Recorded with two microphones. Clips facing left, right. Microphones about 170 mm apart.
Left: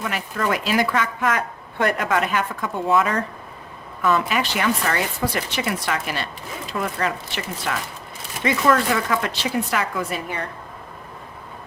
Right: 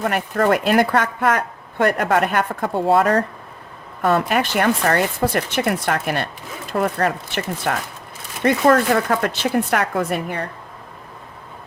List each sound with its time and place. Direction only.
0.0 s speech: 60° right (ahead or behind)
4.3 s speech: 50° right (ahead or behind)